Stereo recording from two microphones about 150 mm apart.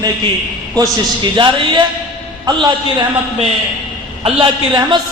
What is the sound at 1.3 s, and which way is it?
A man's voice, 30° right (ahead or behind).